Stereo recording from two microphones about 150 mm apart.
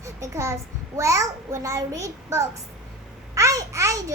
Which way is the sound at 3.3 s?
20° right (ahead or behind).